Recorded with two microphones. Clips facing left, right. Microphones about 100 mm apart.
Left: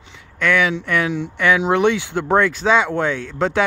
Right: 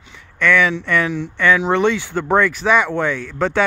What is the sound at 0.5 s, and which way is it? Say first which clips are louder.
Speech: right 1 dB; 15° left (ahead or behind).